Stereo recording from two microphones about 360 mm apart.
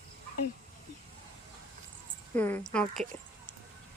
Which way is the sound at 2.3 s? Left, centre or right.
Centre.